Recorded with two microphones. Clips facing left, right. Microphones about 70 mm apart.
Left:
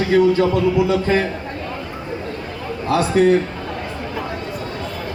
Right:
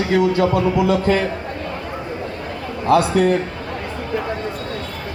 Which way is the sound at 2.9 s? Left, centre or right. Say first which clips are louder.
Right 1 dB; right.